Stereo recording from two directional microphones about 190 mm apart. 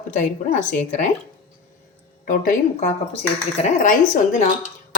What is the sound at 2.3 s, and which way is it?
Speech, 40° left (ahead or behind).